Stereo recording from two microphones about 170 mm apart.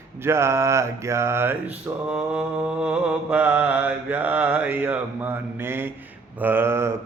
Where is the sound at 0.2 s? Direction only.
15° right (ahead or behind).